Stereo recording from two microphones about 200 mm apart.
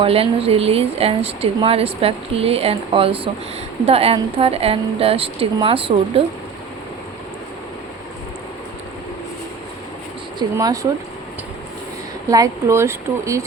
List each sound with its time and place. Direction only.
0.0 s speech: 30° right (ahead or behind)
10.3 s speech: 20° right (ahead or behind)
12.3 s speech: 15° right (ahead or behind)